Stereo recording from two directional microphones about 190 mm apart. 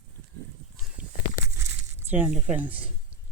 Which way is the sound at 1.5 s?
10° right (ahead or behind).